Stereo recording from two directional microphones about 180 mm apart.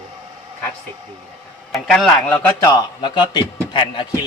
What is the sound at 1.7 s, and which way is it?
A man's voice, centre (ahead or behind).